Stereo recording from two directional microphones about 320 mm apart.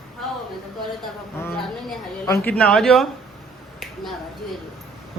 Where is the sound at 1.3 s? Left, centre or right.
Centre.